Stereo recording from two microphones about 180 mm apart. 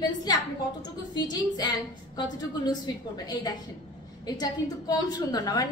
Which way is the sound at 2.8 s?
20° left (ahead or behind).